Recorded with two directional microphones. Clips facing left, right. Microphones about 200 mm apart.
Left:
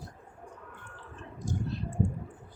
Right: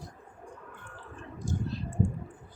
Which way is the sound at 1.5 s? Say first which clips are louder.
Even; 15° left (ahead or behind).